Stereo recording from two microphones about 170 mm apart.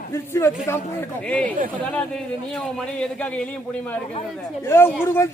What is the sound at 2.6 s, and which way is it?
Speech, 5° left (ahead or behind).